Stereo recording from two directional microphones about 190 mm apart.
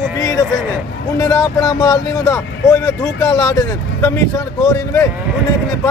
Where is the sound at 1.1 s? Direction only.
20° left (ahead or behind).